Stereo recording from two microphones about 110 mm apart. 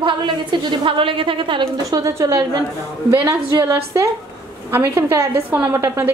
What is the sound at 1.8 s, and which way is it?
Speech, 30° right (ahead or behind).